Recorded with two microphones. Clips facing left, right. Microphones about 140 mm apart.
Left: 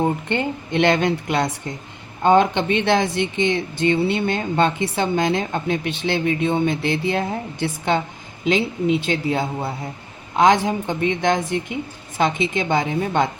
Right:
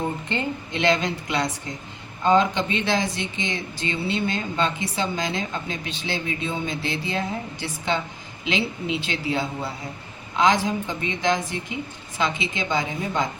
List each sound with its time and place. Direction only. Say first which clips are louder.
0.3 s a man's voice: left 5 dB; 60° left (ahead or behind)